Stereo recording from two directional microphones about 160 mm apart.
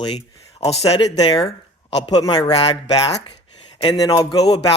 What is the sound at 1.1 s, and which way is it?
A man's voice, 25° left (ahead or behind).